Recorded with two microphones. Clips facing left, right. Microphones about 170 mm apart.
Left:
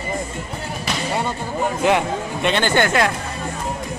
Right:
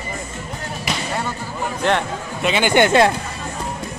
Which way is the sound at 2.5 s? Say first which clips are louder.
Right 4 dB; 15° right (ahead or behind).